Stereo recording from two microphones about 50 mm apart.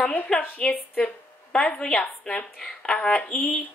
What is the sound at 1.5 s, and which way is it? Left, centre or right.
Speech, centre.